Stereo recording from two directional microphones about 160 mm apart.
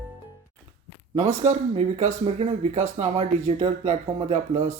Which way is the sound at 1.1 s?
45° right (ahead or behind).